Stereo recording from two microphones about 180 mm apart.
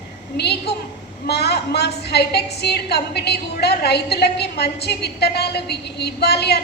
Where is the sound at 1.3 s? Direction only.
65° left (ahead or behind).